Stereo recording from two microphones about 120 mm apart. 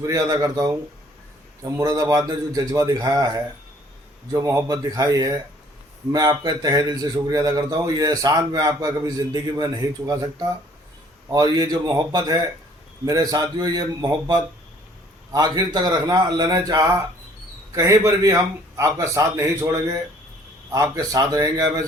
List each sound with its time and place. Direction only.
0.0 s a man's voice: 30° right (ahead or behind)